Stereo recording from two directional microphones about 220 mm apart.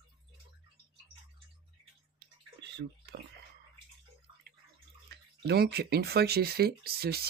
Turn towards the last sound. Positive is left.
turn(degrees=-45)  # may be behind; listen again after turning